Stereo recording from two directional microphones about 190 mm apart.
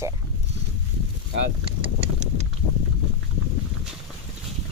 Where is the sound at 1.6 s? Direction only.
30° right (ahead or behind).